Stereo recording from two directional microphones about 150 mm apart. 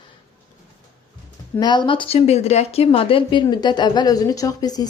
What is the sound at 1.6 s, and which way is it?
A woman's voice, 30° left (ahead or behind).